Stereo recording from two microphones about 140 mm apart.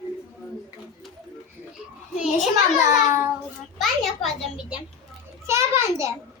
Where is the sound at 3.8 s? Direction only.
Centre (ahead or behind).